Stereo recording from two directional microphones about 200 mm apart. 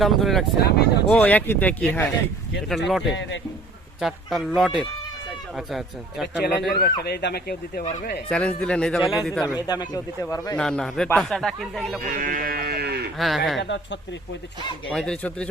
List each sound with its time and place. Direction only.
0.0 s speech: centre (ahead or behind)
3.2 s speech: 65° left (ahead or behind)
4.0 s speech: centre (ahead or behind)
6.7 s speech: 50° left (ahead or behind)
8.3 s speech: 5° left (ahead or behind)
9.6 s speech: 20° left (ahead or behind)
10.6 s speech: centre (ahead or behind)
12.0 s speech: 45° right (ahead or behind)
13.1 s speech: centre (ahead or behind)
13.6 s speech: 65° left (ahead or behind)
14.8 s speech: 5° left (ahead or behind)